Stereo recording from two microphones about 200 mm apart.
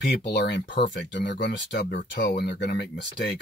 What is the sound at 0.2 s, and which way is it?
Speech, 60° left (ahead or behind).